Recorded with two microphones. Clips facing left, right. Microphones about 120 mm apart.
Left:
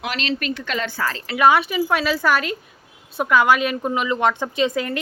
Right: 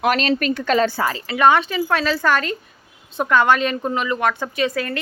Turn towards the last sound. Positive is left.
turn(degrees=20)  # may be behind; listen again after turning